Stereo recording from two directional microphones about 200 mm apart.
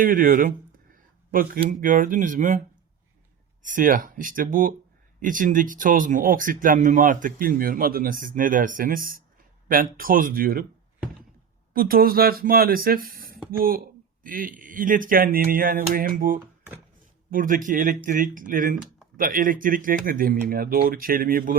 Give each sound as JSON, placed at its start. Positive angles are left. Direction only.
{"t": 0.0, "sound": "speech", "side_deg": -45}
{"t": 3.6, "sound": "speech", "side_deg": -40}
{"t": 11.7, "sound": "speech", "side_deg": -50}